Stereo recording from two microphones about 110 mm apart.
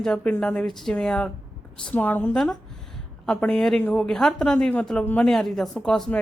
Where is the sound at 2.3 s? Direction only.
5° left (ahead or behind).